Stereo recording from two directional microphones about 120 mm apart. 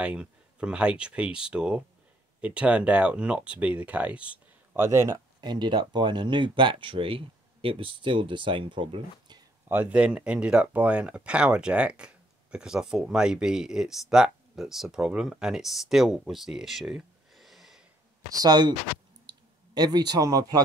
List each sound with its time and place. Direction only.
0.0 s speech: 10° right (ahead or behind)
5.4 s speech: 35° right (ahead or behind)
9.7 s speech: 15° right (ahead or behind)
18.3 s speech: 35° right (ahead or behind)
19.2 s clicking: 35° right (ahead or behind)